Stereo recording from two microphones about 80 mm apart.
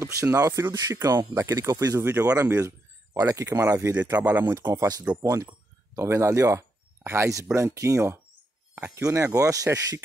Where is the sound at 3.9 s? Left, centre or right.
Right.